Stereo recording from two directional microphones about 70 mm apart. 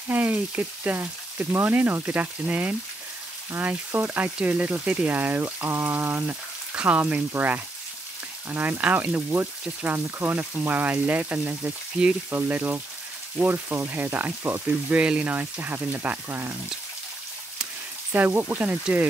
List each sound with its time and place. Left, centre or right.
0.1 s speech: right
18.1 s speech: right